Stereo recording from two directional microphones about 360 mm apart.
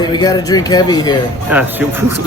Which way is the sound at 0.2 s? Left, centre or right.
Centre.